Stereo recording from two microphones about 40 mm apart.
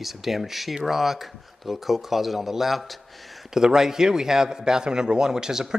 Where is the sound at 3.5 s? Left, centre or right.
Centre.